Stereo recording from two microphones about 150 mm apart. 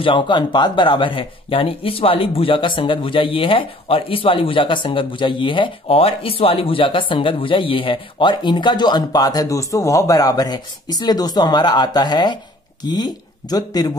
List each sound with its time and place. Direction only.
0.0 s speech: 30° left (ahead or behind)